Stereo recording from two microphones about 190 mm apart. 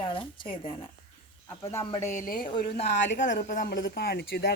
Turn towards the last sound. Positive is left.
turn(degrees=60)  # may be behind; listen again after turning